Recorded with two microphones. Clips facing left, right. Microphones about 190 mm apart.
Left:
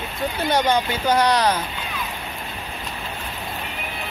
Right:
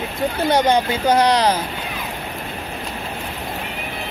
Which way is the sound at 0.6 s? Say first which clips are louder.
Right 3 dB; 35° right (ahead or behind).